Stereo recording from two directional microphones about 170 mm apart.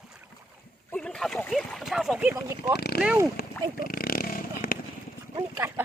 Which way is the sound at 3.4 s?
65° left (ahead or behind).